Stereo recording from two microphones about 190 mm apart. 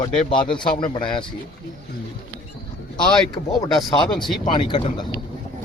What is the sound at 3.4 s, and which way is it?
Speech, 40° left (ahead or behind).